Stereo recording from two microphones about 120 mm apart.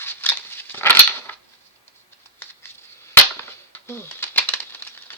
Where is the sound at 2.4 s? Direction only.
20° left (ahead or behind).